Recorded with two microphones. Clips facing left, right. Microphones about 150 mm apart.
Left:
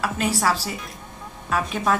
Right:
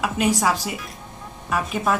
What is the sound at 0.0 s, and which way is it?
A woman's voice, 15° right (ahead or behind).